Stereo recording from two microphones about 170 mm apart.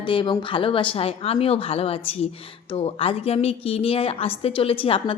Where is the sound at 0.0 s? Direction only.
30° left (ahead or behind).